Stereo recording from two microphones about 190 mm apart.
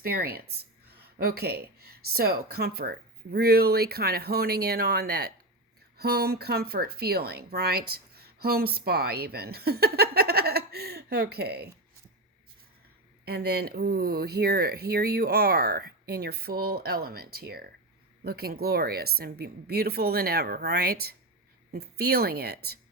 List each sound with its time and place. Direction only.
0.0 s a woman's voice: 55° right (ahead or behind)
13.2 s a woman's voice: 55° right (ahead or behind)